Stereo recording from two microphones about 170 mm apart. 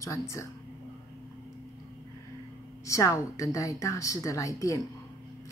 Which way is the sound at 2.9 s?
20° left (ahead or behind).